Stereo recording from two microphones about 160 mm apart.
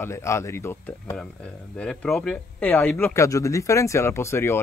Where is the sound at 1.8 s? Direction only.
5° left (ahead or behind).